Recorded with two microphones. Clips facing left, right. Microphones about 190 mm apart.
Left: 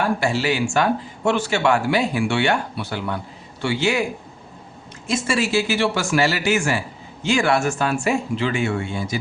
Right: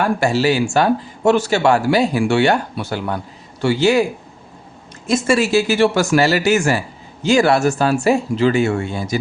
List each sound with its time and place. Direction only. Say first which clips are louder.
0.2 s speech: right 5 dB; 40° right (ahead or behind)
5.0 s speech: right 6 dB; 45° right (ahead or behind)